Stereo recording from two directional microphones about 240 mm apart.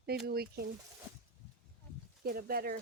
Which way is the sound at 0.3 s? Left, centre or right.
Right.